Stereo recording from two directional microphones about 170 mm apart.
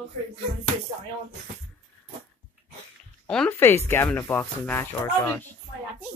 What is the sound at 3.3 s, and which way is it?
Speech, 10° left (ahead or behind).